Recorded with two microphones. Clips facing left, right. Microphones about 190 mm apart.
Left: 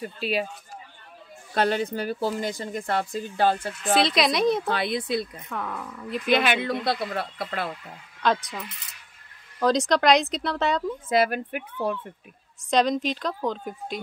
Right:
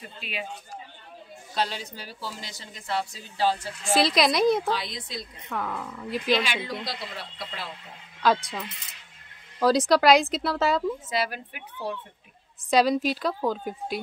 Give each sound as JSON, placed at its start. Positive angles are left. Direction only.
{"t": 0.2, "sound": "speech", "side_deg": 40}
{"t": 1.5, "sound": "speech", "side_deg": 55}
{"t": 3.9, "sound": "a woman's voice", "side_deg": 0}
{"t": 4.6, "sound": "speech", "side_deg": 60}
{"t": 5.5, "sound": "a woman's voice", "side_deg": 0}
{"t": 6.2, "sound": "speech", "side_deg": 55}
{"t": 8.2, "sound": "a woman's voice", "side_deg": -5}
{"t": 9.6, "sound": "a woman's voice", "side_deg": -5}
{"t": 11.1, "sound": "speech", "side_deg": 55}
{"t": 12.6, "sound": "a woman's voice", "side_deg": -5}